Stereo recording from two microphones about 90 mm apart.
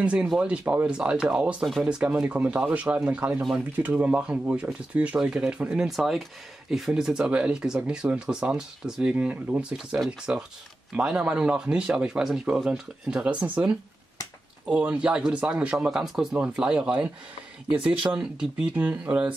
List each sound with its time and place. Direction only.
0.0 s speech: 15° right (ahead or behind)
5.9 s speech: centre (ahead or behind)